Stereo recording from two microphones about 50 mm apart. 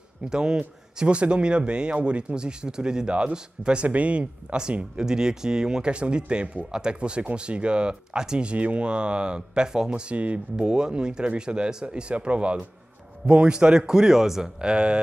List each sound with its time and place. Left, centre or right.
0.3 s speech: centre
10.5 s speech: centre
13.8 s a man's voice: centre